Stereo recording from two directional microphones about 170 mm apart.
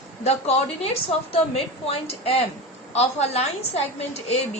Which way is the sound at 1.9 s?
35° left (ahead or behind).